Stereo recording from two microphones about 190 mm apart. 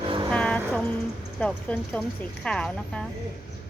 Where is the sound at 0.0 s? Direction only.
25° right (ahead or behind).